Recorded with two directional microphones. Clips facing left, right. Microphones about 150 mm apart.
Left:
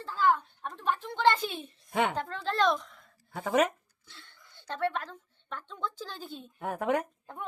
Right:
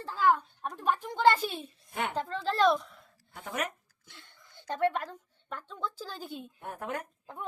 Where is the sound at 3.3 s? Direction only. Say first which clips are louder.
Left 9 dB; 90° left.